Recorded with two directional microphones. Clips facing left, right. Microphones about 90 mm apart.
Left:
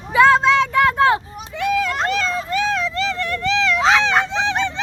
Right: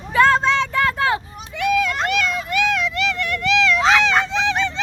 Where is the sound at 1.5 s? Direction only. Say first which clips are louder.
Even; 25° left (ahead or behind).